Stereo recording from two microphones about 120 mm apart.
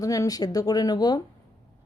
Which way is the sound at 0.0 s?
30° left (ahead or behind).